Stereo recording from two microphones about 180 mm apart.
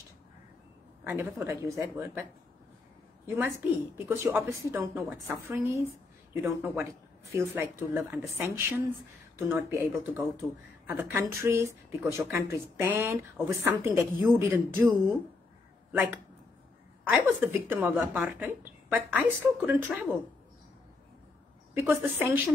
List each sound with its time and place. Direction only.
1.0 s speech: 10° right (ahead or behind)
3.3 s speech: 15° right (ahead or behind)
15.9 s speech: 10° right (ahead or behind)
21.7 s speech: 10° right (ahead or behind)